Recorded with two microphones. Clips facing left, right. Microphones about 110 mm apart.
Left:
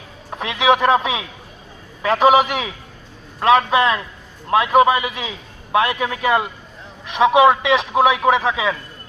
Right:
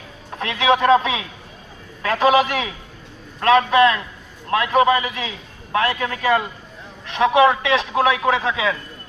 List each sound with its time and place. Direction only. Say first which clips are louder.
0.3 s a man's voice: left 1 dB; 15° left (ahead or behind)